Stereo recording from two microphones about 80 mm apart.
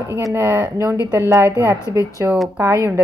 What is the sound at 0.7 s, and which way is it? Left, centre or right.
Speech, right.